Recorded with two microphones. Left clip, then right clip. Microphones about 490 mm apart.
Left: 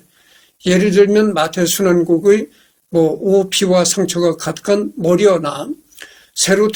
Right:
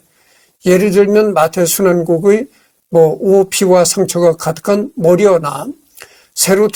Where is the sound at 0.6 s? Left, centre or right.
Right.